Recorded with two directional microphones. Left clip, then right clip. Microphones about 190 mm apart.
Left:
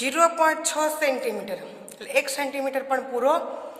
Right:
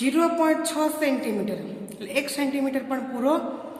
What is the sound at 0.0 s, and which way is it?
Speech, 50° left (ahead or behind).